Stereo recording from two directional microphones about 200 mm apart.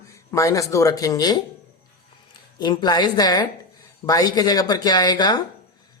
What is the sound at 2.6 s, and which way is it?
Speech, 20° left (ahead or behind).